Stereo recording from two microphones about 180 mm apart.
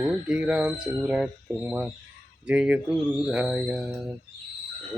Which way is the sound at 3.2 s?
5° right (ahead or behind).